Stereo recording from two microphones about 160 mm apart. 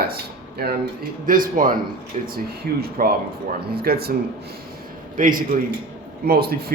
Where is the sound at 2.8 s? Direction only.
70° right (ahead or behind).